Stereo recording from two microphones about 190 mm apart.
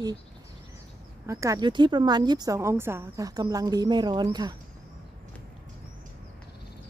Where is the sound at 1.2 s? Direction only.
15° right (ahead or behind).